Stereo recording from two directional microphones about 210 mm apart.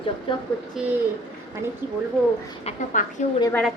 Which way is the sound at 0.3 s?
25° left (ahead or behind).